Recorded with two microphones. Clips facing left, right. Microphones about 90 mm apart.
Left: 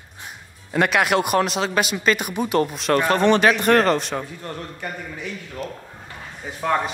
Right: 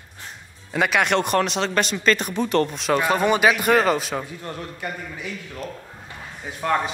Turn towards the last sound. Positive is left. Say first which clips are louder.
# left 1 dB
turn(degrees=0)  # may be behind; listen again after turning